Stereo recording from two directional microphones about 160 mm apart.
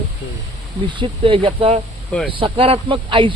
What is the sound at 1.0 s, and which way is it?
Speech, 35° right (ahead or behind).